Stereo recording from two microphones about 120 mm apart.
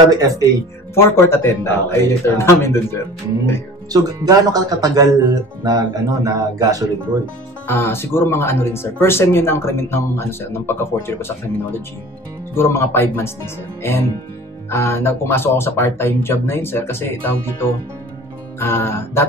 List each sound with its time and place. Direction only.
0.1 s speech: 30° right (ahead or behind)
0.9 s speech: 20° left (ahead or behind)
3.9 s speech: 30° right (ahead or behind)
7.6 s speech: 20° left (ahead or behind)
14.7 s speech: 20° left (ahead or behind)
18.6 s speech: 20° left (ahead or behind)